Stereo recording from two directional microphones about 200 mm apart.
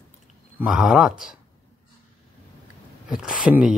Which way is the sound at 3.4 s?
5° right (ahead or behind).